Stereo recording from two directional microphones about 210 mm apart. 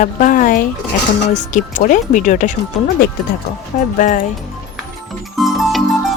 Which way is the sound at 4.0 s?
35° left (ahead or behind).